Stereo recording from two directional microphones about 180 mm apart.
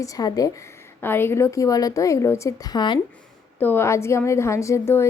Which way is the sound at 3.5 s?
10° left (ahead or behind).